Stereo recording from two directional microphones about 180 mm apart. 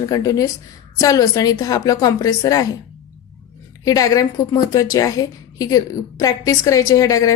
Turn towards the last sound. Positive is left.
turn(degrees=20)  # may be behind; listen again after turning